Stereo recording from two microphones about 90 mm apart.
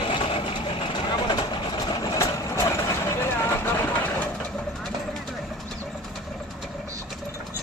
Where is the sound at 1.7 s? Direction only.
50° left (ahead or behind).